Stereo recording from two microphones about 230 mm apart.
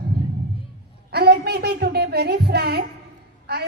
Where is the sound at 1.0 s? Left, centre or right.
Right.